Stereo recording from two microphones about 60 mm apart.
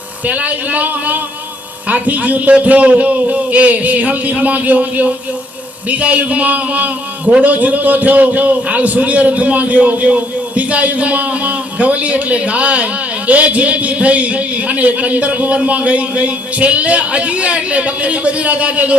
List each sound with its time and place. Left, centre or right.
0.3 s a man's voice: right